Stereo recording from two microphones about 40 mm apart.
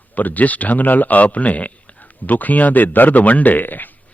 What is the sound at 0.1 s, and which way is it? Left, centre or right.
A man's voice, left.